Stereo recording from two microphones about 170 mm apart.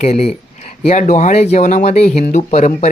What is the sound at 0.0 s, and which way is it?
Speech, 40° left (ahead or behind).